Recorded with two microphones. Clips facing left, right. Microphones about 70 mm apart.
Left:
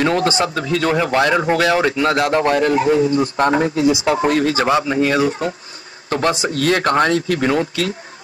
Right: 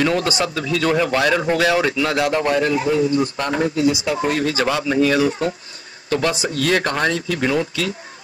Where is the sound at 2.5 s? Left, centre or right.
Left.